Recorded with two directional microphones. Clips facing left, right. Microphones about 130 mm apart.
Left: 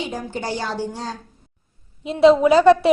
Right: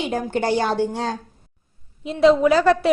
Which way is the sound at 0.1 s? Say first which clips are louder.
Right 6 dB; 60° right (ahead or behind).